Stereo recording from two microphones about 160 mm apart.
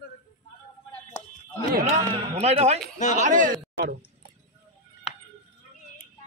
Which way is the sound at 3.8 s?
70° right (ahead or behind).